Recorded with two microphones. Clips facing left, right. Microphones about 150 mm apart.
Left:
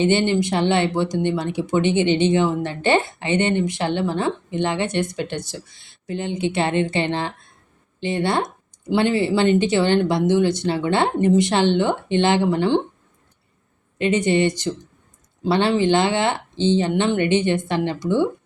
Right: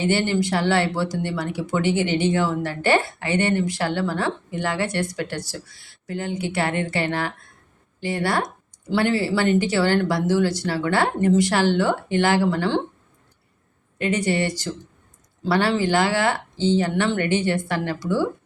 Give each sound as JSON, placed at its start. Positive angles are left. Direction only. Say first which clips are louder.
{"t": 0.0, "sound": "speech", "louder": "left 3 dB", "side_deg": 20}
{"t": 14.0, "sound": "speech", "louder": "left 4 dB", "side_deg": 20}